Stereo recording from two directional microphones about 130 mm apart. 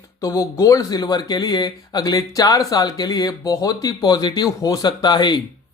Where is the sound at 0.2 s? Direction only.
25° left (ahead or behind).